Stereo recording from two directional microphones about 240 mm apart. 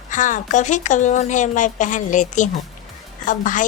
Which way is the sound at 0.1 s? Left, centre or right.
Left.